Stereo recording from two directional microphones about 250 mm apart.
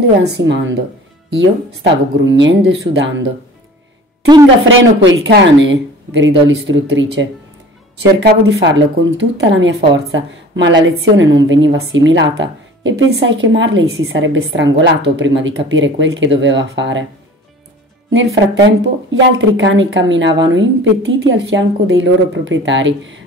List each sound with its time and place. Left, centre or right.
0.2 s a woman's voice: right
4.6 s a woman's voice: right
8.3 s a woman's voice: right
18.1 s a woman's voice: right